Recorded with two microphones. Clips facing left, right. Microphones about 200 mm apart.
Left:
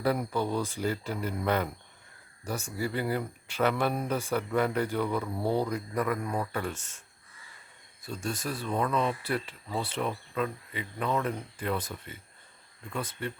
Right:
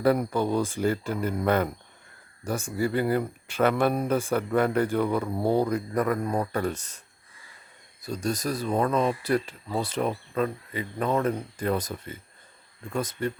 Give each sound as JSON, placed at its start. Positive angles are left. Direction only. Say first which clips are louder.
{"t": 0.0, "sound": "speech", "louder": "right 5 dB", "side_deg": -50}
{"t": 8.0, "sound": "speech", "louder": "right 6 dB", "side_deg": -40}